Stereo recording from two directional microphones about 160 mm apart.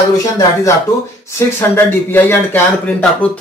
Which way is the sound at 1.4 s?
15° left (ahead or behind).